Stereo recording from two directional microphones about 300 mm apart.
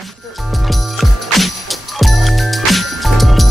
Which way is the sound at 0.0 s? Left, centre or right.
Centre.